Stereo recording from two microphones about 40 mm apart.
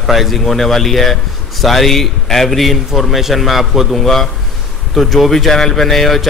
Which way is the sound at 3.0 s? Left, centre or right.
Centre.